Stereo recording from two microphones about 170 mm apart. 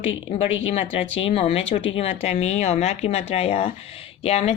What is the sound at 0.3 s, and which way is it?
Speech, 40° left (ahead or behind).